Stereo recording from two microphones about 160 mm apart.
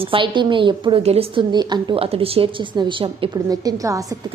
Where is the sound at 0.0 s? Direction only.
30° right (ahead or behind).